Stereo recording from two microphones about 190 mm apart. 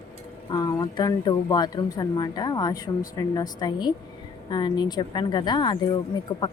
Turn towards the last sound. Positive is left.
turn(degrees=25)  # may be behind; listen again after turning